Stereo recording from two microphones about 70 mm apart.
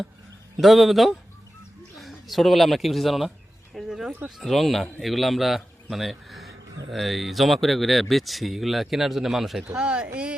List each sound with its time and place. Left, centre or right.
0.6 s speech: centre
9.6 s speech: centre